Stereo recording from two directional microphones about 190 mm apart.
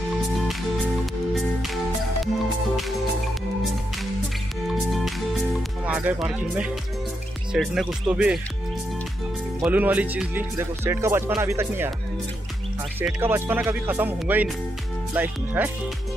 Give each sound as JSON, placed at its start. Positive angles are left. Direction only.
{"t": 4.6, "sound": "music", "side_deg": 0}
{"t": 7.5, "sound": "speech", "side_deg": 0}
{"t": 9.6, "sound": "speech", "side_deg": -10}
{"t": 13.0, "sound": "speech", "side_deg": -10}